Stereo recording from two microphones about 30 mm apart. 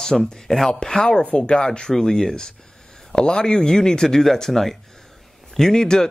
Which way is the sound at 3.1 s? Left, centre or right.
Left.